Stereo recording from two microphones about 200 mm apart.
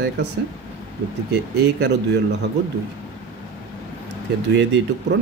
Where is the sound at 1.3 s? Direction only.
55° right (ahead or behind).